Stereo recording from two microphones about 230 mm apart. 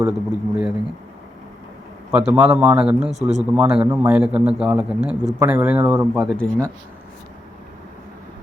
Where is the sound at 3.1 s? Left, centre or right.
Right.